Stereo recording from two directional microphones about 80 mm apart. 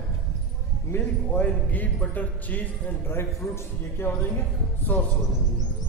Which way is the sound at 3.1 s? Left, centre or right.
Left.